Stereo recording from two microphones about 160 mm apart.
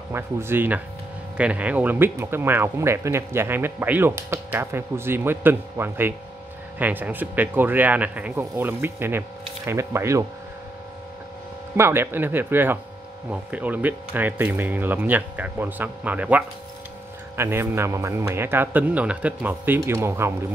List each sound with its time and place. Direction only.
0.1 s speech: 15° right (ahead or behind)
11.7 s speech: 15° right (ahead or behind)